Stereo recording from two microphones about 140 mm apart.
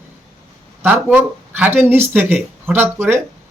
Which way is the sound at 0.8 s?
15° right (ahead or behind).